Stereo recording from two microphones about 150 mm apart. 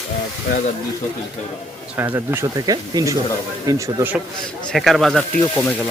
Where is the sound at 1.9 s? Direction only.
15° right (ahead or behind).